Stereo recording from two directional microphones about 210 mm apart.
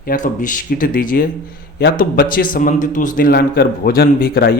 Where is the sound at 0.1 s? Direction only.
40° left (ahead or behind).